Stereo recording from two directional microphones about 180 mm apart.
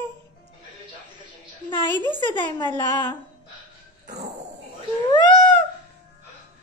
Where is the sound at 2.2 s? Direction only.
25° left (ahead or behind).